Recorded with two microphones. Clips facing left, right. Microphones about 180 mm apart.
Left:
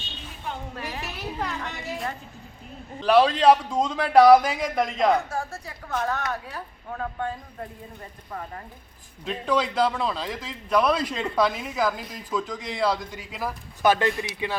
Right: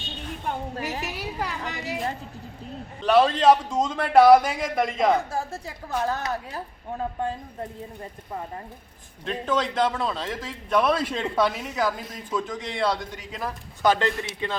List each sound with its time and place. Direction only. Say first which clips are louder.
0.7 s a sound: right 3 dB; 40° right (ahead or behind)
1.1 s a woman's voice: even; 10° right (ahead or behind)
3.0 s a man's voice: even; centre (ahead or behind)
5.6 s a woman's voice: right 1 dB; 30° right (ahead or behind)
9.2 s a man's voice: left 1 dB; centre (ahead or behind)